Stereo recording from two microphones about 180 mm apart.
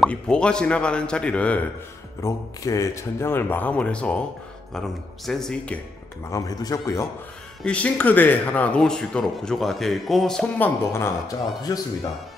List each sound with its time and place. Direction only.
0.0 s speech: 5° left (ahead or behind)
2.2 s speech: 15° left (ahead or behind)
6.3 s speech: 20° left (ahead or behind)
7.6 s speech: 5° left (ahead or behind)